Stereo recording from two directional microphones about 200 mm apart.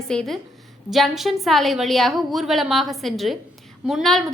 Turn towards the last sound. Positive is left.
turn(degrees=0)  # may be behind; listen again after turning